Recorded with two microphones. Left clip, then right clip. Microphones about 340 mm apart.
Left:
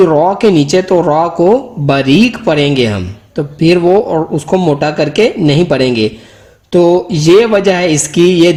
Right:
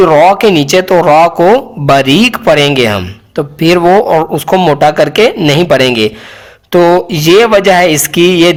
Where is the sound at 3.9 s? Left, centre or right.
Right.